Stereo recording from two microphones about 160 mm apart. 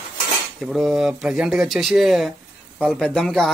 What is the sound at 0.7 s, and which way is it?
Speech, centre (ahead or behind).